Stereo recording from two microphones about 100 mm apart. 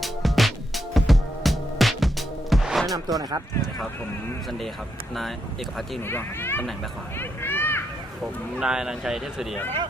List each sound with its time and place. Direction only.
0.0 s music: centre (ahead or behind)
3.2 s speech: 40° right (ahead or behind)
6.1 s a child's voice: 20° left (ahead or behind)
8.5 s speech: 5° right (ahead or behind)